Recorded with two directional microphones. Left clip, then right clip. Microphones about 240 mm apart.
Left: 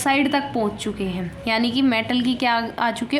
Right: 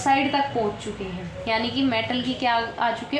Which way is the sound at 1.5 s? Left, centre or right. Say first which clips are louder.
Left 3 dB; left.